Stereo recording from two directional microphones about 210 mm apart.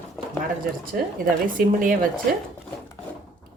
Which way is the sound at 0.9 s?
45° right (ahead or behind).